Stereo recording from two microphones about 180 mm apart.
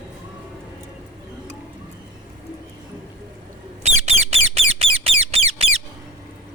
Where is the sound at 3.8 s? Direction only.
35° right (ahead or behind).